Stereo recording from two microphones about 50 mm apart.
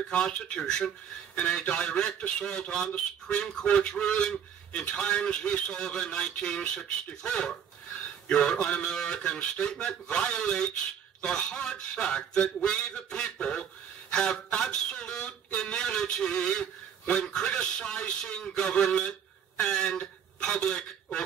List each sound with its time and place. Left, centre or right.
0.1 s speech: left